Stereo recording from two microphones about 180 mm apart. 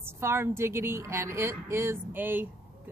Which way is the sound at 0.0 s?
15° right (ahead or behind).